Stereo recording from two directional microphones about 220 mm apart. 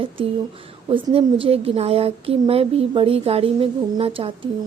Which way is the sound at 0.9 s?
25° right (ahead or behind).